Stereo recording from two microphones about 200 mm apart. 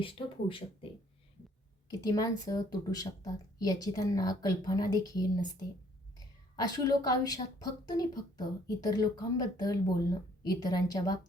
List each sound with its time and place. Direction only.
0.0 s a woman's voice: 25° left (ahead or behind)
1.9 s a woman's voice: 20° left (ahead or behind)